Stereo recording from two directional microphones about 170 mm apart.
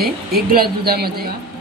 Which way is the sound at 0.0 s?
65° right (ahead or behind).